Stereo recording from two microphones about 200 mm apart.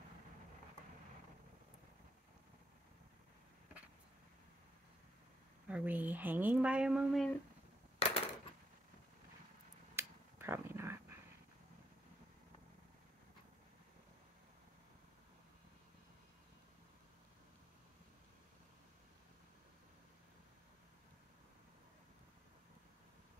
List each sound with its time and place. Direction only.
5.7 s speech: 5° right (ahead or behind)
8.0 s coin: 30° left (ahead or behind)
9.9 s finger snapping: 10° right (ahead or behind)